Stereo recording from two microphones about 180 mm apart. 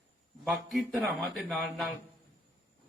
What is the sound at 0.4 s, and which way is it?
Speech, centre (ahead or behind).